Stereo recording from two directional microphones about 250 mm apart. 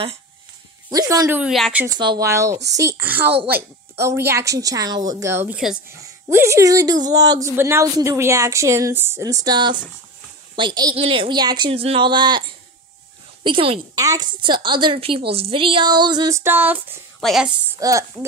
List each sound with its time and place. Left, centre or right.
0.8 s speech: centre
1.4 s speech: centre
4.0 s a woman's voice: centre
17.7 s speech: centre